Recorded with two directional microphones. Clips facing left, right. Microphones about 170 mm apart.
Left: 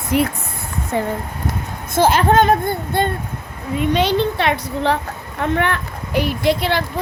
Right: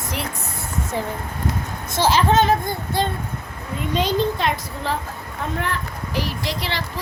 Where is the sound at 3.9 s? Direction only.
70° left (ahead or behind).